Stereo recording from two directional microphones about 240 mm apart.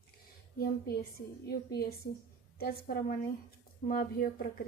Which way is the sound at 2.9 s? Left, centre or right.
Left.